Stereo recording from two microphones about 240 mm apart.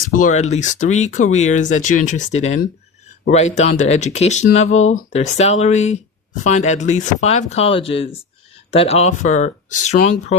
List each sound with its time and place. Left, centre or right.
0.1 s speech: left
4.7 s speech: left
5.1 s speech: left